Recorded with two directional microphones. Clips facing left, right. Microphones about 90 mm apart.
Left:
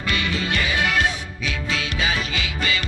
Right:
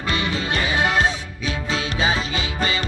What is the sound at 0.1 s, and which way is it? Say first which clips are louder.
Music: right 1 dB; 30° right (ahead or behind).